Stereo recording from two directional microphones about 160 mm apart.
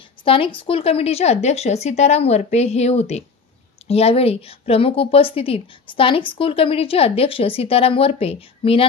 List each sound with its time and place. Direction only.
0.2 s a woman's voice: 35° left (ahead or behind)